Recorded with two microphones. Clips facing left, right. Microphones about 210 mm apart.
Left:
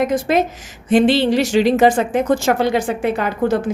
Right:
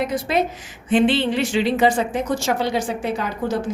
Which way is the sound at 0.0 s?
45° left (ahead or behind).